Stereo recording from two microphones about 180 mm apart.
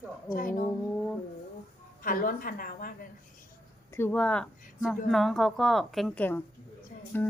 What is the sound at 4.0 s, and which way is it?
A woman's voice, 5° left (ahead or behind).